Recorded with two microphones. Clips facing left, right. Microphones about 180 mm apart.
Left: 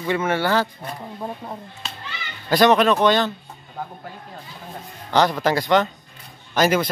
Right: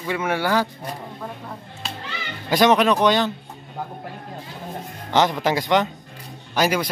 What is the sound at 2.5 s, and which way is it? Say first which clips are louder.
Speech: left 1 dB; 15° right (ahead or behind).